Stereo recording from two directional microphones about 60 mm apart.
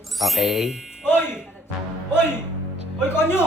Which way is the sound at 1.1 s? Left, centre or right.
Left.